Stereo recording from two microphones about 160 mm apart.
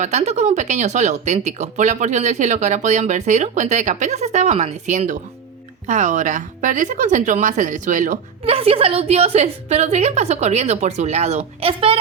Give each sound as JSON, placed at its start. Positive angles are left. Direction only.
{"t": 0.0, "sound": "speech", "side_deg": -45}
{"t": 8.4, "sound": "speech", "side_deg": -35}